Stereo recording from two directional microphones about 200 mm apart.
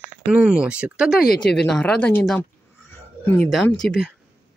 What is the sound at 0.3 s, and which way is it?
Speech, 5° right (ahead or behind).